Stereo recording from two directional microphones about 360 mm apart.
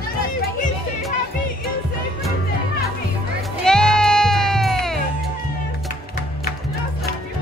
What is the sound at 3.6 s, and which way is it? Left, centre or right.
Music, centre.